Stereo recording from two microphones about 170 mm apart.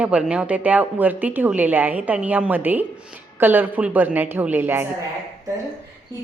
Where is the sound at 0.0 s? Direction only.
5° right (ahead or behind).